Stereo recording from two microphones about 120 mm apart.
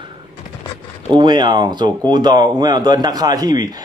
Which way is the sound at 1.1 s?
40° right (ahead or behind).